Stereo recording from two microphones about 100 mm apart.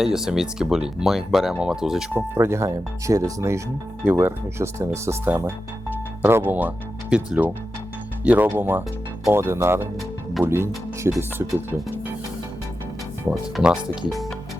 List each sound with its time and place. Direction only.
0.0 s speech: 5° right (ahead or behind)
2.1 s speech: 25° right (ahead or behind)
13.3 s speech: 10° right (ahead or behind)